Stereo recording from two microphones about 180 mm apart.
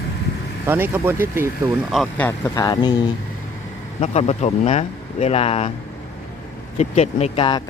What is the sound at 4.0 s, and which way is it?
Speech, 40° left (ahead or behind).